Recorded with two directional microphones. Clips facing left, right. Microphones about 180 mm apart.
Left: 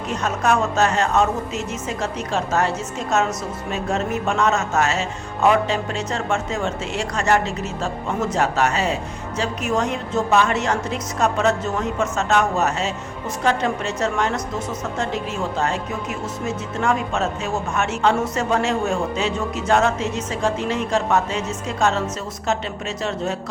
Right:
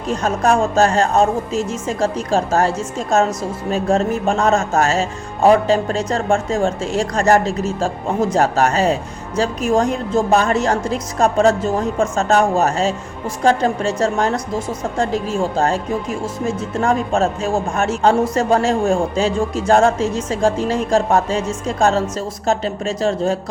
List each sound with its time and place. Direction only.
0.1 s a woman's voice: 35° right (ahead or behind)